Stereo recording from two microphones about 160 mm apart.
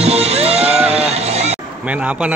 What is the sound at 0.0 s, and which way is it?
Music, 40° right (ahead or behind).